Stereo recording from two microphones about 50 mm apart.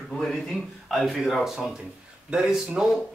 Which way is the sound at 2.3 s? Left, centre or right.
Centre.